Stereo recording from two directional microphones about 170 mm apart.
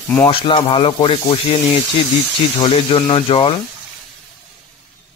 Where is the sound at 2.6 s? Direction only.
30° left (ahead or behind).